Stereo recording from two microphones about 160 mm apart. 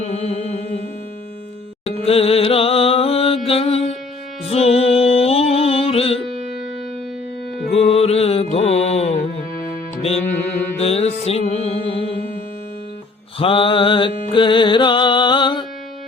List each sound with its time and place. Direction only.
0.0 s music: 40° left (ahead or behind)
2.0 s mantra: 40° left (ahead or behind)
4.4 s music: 40° left (ahead or behind)
7.7 s music: 40° left (ahead or behind)
10.8 s music: 40° left (ahead or behind)
13.4 s music: 35° left (ahead or behind)